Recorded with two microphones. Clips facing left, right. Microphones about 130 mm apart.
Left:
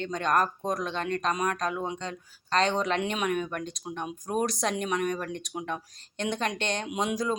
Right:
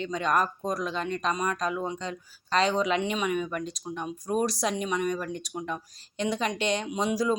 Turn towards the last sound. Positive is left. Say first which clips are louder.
# right 2 dB
turn(degrees=-5)  # may be behind; listen again after turning